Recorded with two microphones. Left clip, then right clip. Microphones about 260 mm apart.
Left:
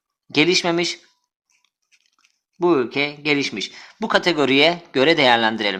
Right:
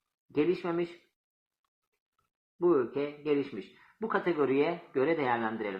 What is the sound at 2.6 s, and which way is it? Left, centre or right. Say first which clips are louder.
Speech: left 9 dB; left.